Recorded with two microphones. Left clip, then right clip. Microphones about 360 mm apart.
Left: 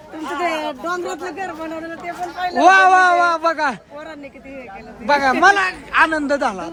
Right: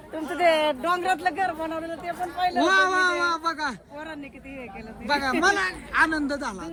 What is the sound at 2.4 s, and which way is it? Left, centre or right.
A man's voice, centre.